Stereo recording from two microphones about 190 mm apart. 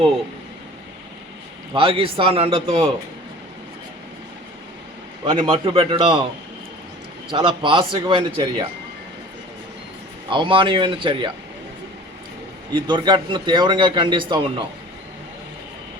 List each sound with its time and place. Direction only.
1.7 s a man's voice: 30° right (ahead or behind)
5.2 s a man's voice: 25° right (ahead or behind)
7.3 s a man's voice: 25° right (ahead or behind)
10.2 s a man's voice: 25° right (ahead or behind)
12.7 s a man's voice: 25° right (ahead or behind)